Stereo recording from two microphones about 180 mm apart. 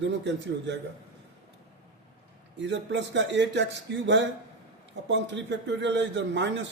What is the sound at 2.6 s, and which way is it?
A man's voice, 80° right.